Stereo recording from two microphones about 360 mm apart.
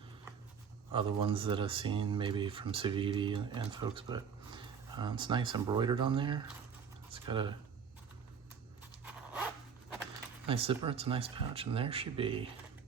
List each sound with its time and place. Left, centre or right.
0.9 s speech: centre
9.0 s dog: centre
10.4 s speech: centre